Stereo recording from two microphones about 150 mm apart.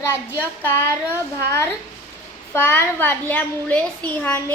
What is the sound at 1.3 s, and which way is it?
A child's voice, 15° left (ahead or behind).